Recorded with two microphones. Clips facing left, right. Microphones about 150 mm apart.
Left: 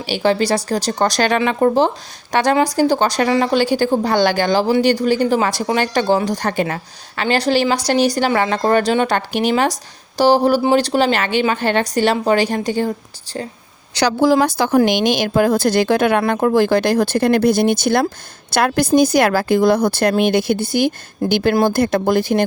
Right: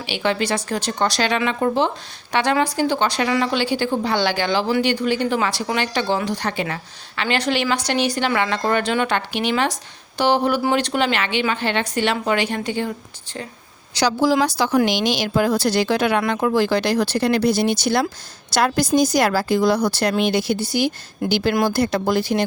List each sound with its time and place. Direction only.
0.0 s a woman's voice: 35° left (ahead or behind)
13.9 s a woman's voice: 60° left (ahead or behind)